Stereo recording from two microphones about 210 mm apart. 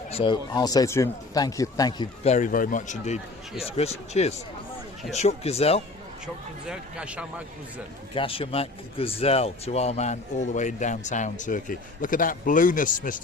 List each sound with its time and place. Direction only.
0.1 s speech: 25° left (ahead or behind)
2.3 s speech: 40° left (ahead or behind)
6.2 s speech: 5° right (ahead or behind)
8.1 s speech: 25° left (ahead or behind)